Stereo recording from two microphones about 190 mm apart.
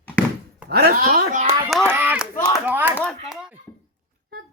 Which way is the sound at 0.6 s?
55° right (ahead or behind).